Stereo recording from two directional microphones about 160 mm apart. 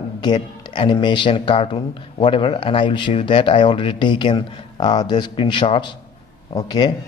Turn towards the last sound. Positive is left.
turn(degrees=25)  # may be behind; listen again after turning